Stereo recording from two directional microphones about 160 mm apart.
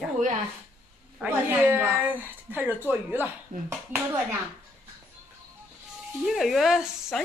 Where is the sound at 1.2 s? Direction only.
10° right (ahead or behind).